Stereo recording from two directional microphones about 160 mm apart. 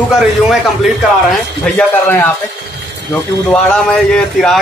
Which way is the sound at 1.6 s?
15° left (ahead or behind).